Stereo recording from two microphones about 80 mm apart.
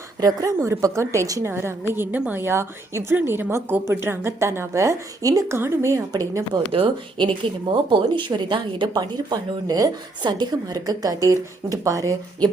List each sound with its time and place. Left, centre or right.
0.2 s a woman's voice: right
6.1 s a woman's voice: right
6.8 s speech: right
10.2 s a woman's voice: right